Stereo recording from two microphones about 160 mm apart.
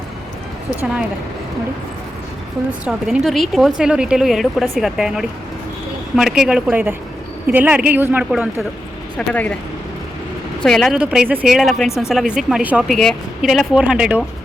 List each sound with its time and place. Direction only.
2.8 s speech: 5° right (ahead or behind)
9.1 s speech: 10° left (ahead or behind)
10.6 s speech: centre (ahead or behind)